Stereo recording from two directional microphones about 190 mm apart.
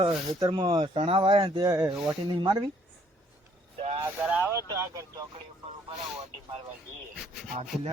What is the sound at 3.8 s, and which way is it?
Speech, 35° right (ahead or behind).